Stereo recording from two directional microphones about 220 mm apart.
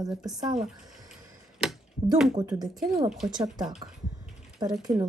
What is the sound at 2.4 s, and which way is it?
Speech, 20° right (ahead or behind).